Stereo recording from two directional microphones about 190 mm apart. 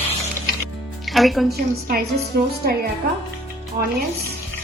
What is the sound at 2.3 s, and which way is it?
Speech, 55° right (ahead or behind).